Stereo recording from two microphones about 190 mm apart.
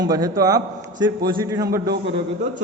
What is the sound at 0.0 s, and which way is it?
A man's voice, 20° right (ahead or behind).